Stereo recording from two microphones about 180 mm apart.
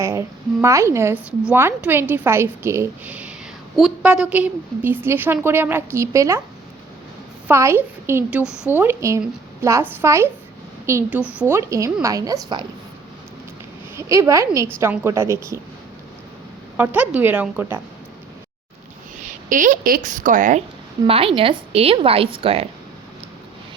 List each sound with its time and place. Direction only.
0.0 s speech: 15° right (ahead or behind)
7.4 s a woman's voice: 15° right (ahead or behind)
13.9 s speech: 15° right (ahead or behind)
16.7 s speech: 10° right (ahead or behind)
19.2 s a woman's voice: 45° right (ahead or behind)
21.0 s a woman's voice: 30° right (ahead or behind)